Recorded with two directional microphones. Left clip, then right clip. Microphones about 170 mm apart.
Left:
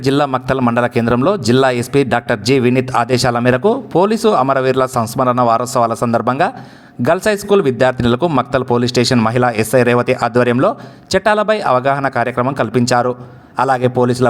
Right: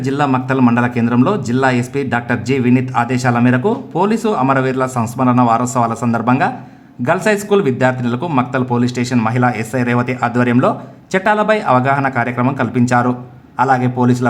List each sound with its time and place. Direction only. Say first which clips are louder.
0.0 s a man's voice: left 2 dB; 35° left (ahead or behind)